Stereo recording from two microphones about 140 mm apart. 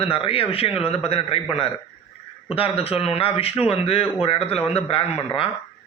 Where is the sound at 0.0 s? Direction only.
40° left (ahead or behind).